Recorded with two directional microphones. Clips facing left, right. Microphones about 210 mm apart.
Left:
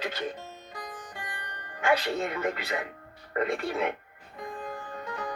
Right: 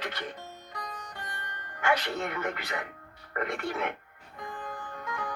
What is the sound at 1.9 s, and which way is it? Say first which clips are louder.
Speech: left 3 dB; 30° left (ahead or behind).